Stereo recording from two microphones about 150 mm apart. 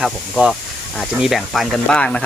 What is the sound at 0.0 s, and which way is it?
Speech, centre (ahead or behind).